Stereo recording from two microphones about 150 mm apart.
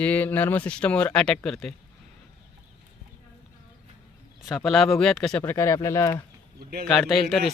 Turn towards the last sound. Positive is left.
turn(degrees=0)  # may be behind; listen again after turning